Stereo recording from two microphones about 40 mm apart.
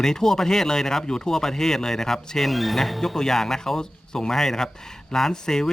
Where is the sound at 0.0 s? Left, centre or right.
Centre.